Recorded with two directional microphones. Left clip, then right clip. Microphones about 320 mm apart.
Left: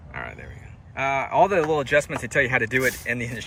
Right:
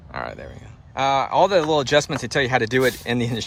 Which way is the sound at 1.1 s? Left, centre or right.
Centre.